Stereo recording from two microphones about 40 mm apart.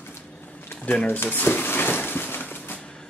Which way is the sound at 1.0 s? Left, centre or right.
Left.